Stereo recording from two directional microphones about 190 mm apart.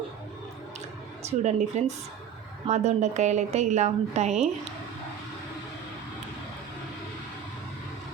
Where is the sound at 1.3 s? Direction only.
40° right (ahead or behind).